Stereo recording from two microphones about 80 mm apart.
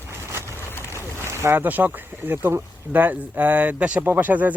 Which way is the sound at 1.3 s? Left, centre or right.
Right.